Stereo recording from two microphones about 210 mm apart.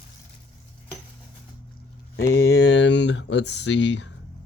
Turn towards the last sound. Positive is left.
turn(degrees=60)  # may be behind; listen again after turning